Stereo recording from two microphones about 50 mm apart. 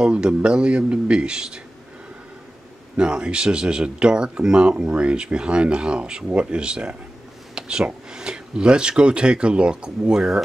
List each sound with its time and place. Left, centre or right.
0.0 s speech: right
3.0 s speech: centre